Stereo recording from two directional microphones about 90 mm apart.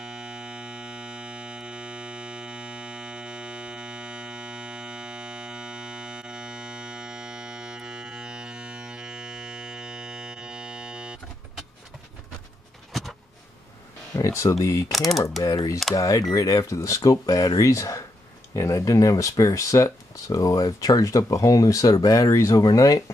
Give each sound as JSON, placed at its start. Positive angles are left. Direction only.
{"t": 0.0, "sound": "music", "side_deg": -10}
{"t": 12.9, "sound": "a sound", "side_deg": 0}
{"t": 14.1, "sound": "speech", "side_deg": 35}
{"t": 14.9, "sound": "speech", "side_deg": 0}
{"t": 15.4, "sound": "speech", "side_deg": 45}